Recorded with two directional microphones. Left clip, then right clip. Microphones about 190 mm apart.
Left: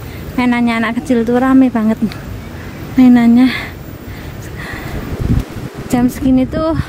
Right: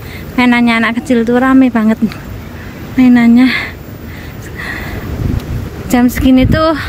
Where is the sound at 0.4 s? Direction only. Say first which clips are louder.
Right 5 dB; 10° left (ahead or behind).